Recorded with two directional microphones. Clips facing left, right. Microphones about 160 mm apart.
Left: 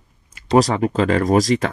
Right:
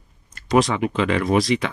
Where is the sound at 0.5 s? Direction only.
40° left (ahead or behind).